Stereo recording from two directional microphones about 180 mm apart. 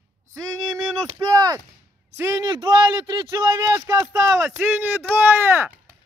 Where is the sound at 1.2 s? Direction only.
20° right (ahead or behind).